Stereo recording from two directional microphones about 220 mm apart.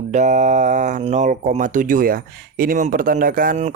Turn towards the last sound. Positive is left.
turn(degrees=-35)  # may be behind; listen again after turning